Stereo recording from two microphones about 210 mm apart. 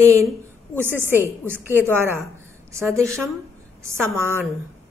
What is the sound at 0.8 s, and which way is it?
Speech, 10° right (ahead or behind).